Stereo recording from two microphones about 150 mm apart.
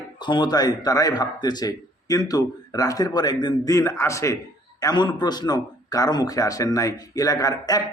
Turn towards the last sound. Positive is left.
turn(degrees=25)  # may be behind; listen again after turning